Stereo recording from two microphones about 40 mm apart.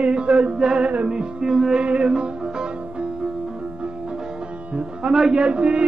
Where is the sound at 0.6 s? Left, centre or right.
Centre.